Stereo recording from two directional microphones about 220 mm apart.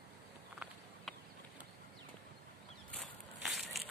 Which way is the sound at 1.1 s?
Centre (ahead or behind).